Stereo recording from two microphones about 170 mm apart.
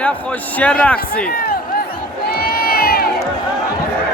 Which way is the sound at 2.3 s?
65° left (ahead or behind).